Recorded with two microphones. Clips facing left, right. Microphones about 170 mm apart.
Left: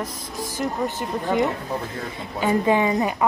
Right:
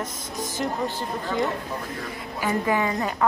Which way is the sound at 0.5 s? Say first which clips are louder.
Left 2 dB; 20° left (ahead or behind).